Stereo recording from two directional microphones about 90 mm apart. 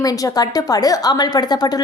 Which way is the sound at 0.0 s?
45° left (ahead or behind).